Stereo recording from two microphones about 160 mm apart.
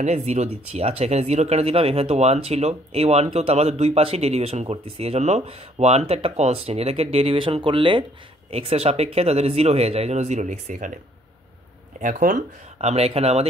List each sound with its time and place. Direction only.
0.0 s speech: 45° right (ahead or behind)
12.0 s speech: 55° right (ahead or behind)
12.7 s speech: 40° right (ahead or behind)